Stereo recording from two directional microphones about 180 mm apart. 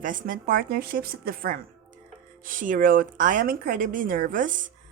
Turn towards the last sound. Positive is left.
turn(degrees=-45)  # may be behind; listen again after turning